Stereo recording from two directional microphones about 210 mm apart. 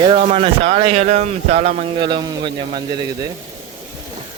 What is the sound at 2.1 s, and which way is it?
A man's voice, 20° right (ahead or behind).